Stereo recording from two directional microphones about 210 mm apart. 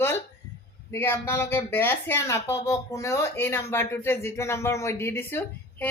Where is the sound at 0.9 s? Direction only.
10° left (ahead or behind).